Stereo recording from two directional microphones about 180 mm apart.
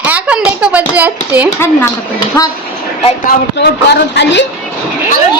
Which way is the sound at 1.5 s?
15° left (ahead or behind).